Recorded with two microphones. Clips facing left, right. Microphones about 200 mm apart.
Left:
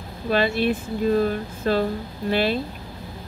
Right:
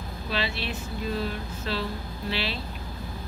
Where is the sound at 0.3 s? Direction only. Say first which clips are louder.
Left 11 dB; 50° left (ahead or behind).